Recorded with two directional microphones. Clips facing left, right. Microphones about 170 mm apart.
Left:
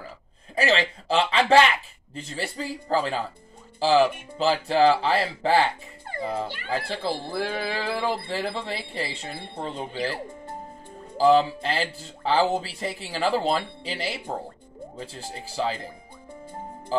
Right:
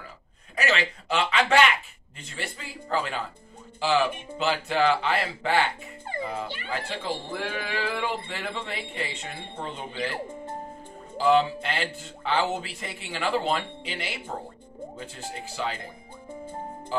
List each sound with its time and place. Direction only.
0.6 s music: 30° left (ahead or behind)
11.1 s music: 35° left (ahead or behind)